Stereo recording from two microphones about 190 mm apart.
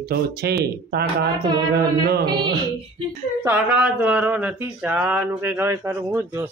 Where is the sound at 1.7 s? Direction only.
55° right (ahead or behind).